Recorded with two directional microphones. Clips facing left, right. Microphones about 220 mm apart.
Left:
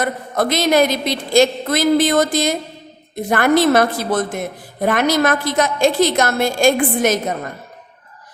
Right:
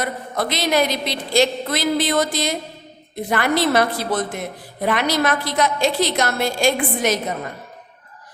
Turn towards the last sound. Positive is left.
turn(degrees=50)  # may be behind; listen again after turning